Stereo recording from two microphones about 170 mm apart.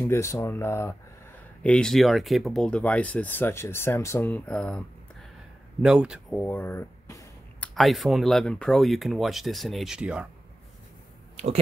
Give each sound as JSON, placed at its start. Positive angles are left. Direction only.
{"t": 0.0, "sound": "speech", "side_deg": 15}
{"t": 5.8, "sound": "speech", "side_deg": -5}
{"t": 6.4, "sound": "speech", "side_deg": 10}
{"t": 7.6, "sound": "speech", "side_deg": 0}